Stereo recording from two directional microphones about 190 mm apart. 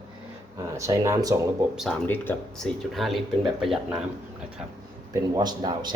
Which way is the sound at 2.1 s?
10° left (ahead or behind).